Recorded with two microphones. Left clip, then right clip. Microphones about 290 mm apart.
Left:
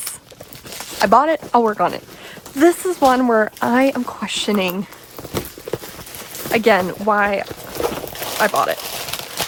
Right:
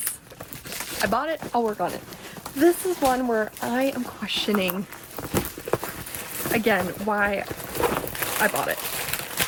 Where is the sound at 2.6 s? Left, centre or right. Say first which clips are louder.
Left 6 dB; centre.